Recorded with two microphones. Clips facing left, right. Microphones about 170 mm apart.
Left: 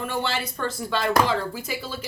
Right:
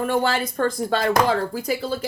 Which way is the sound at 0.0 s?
45° right (ahead or behind).